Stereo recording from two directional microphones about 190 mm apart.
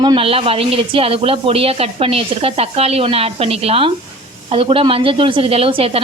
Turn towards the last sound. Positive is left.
turn(degrees=-30)  # may be behind; listen again after turning